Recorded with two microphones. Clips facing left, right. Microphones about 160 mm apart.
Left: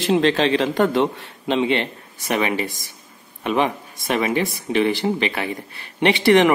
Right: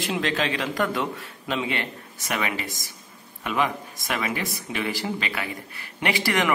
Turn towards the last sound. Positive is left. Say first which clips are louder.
# left 10 dB
turn(degrees=25)  # may be behind; listen again after turning